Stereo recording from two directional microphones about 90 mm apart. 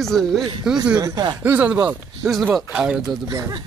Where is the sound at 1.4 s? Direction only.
20° right (ahead or behind).